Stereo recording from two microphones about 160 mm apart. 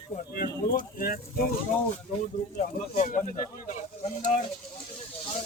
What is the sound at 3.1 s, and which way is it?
Speech, 55° left (ahead or behind).